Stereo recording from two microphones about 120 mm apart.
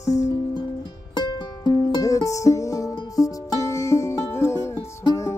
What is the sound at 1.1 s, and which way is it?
Music, 40° left (ahead or behind).